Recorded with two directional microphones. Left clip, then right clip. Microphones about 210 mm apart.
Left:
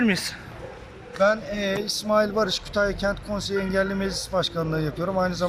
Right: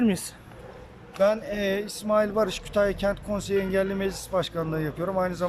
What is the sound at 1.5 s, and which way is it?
Speech, 25° right (ahead or behind).